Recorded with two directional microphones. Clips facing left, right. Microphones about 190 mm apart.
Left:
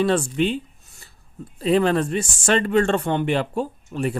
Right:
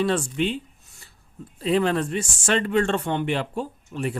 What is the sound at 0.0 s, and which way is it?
Speech, 40° left (ahead or behind).